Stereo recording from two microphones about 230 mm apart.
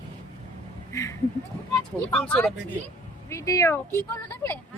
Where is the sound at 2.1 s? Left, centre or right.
Centre.